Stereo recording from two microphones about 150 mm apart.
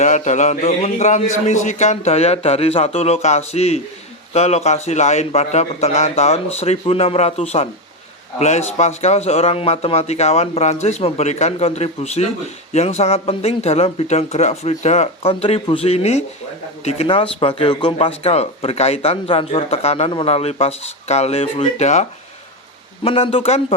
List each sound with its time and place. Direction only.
0.0 s speech: 50° left (ahead or behind)
23.0 s speech: 40° left (ahead or behind)